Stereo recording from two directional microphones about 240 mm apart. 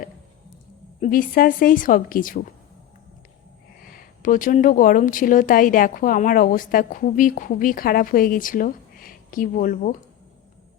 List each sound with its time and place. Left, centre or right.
1.0 s speech: left
3.8 s speech: left